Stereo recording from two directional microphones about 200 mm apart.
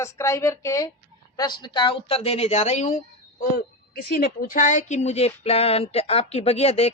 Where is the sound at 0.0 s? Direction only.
15° left (ahead or behind); by 3.0 s 35° left (ahead or behind).